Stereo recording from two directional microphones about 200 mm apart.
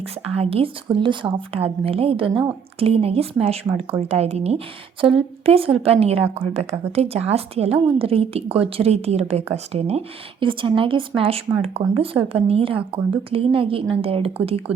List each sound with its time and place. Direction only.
0.3 s a woman's voice: 30° right (ahead or behind)